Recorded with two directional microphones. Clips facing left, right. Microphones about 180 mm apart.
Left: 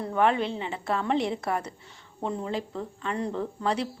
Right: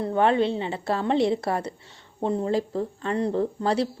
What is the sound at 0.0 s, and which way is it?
A woman's voice, 30° right (ahead or behind).